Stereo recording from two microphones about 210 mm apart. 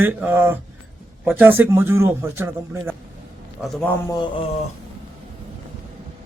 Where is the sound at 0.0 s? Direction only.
10° right (ahead or behind).